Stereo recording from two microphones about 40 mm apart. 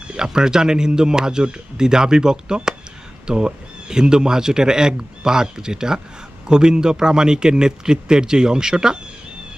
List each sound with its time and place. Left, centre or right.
0.1 s speech: centre